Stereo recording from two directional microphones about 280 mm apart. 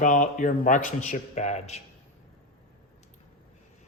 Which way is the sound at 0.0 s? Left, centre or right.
Left.